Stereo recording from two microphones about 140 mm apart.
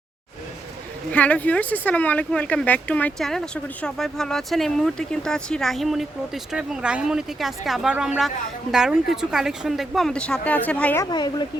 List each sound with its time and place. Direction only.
1.1 s speech: 10° left (ahead or behind)
11.0 s speech: 30° left (ahead or behind)